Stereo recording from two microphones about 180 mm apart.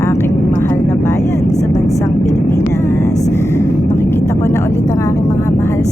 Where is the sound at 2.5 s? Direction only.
15° left (ahead or behind).